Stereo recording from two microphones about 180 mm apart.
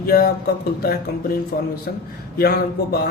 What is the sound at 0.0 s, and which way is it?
Speech, 55° left (ahead or behind).